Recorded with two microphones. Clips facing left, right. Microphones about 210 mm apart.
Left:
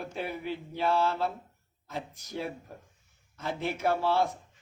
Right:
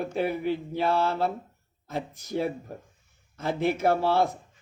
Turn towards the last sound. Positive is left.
turn(degrees=-55)  # may be behind; listen again after turning